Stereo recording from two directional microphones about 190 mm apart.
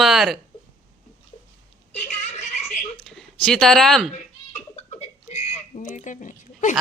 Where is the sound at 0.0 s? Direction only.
Centre (ahead or behind).